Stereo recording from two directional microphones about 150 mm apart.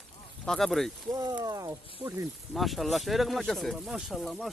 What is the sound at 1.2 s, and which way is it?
Speech, 25° right (ahead or behind).